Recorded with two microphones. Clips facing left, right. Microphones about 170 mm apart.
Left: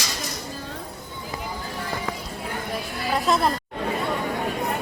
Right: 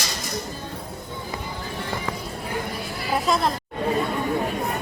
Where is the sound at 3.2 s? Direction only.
Centre (ahead or behind).